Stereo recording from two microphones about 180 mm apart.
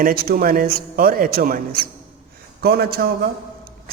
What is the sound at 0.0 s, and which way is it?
A man's voice, 55° right (ahead or behind).